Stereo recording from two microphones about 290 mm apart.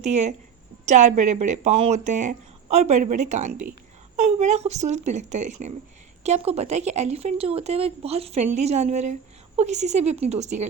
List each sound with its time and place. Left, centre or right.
0.0 s speech: right